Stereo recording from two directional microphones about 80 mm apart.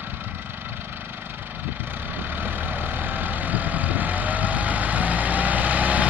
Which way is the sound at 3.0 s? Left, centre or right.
Right.